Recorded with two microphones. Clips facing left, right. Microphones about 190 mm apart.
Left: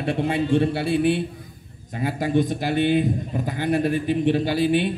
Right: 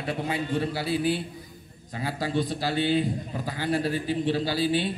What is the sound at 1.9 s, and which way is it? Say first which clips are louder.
A man's voice: left 6 dB; 20° left (ahead or behind).